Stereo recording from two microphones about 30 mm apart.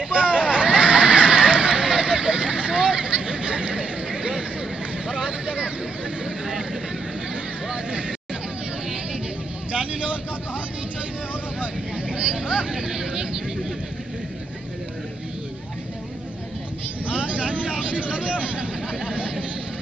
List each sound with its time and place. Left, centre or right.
0.1 s hubbub: right
4.1 s a sound: right
5.2 s vehicle: right
6.2 s vehicle: centre
9.7 s vehicle: right
12.1 s vehicle: right
12.7 s vehicle: centre
17.0 s vehicle: right